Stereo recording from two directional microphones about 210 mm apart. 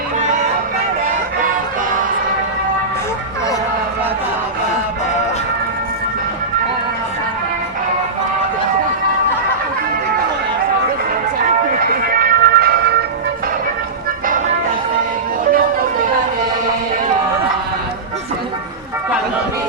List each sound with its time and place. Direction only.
11.4 s music: 40° right (ahead or behind)